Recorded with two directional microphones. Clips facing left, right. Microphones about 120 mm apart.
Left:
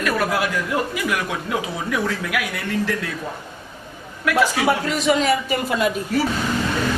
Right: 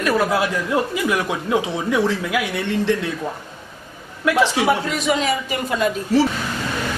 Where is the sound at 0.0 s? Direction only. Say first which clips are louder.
Right 3 dB; 25° right (ahead or behind).